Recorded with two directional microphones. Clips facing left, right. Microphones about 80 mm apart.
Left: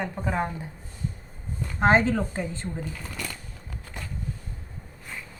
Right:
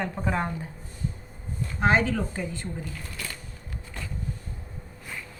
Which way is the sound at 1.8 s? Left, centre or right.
Left.